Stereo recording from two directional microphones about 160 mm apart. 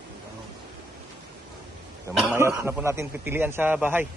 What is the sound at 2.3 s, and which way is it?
A man's voice, 15° right (ahead or behind).